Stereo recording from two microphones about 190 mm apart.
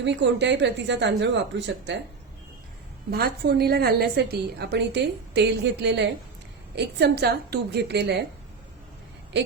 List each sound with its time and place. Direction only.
0.0 s speech: 70° right (ahead or behind)
3.1 s a woman's voice: 55° right (ahead or behind)